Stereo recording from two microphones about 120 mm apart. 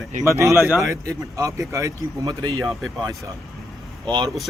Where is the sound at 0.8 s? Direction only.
25° right (ahead or behind).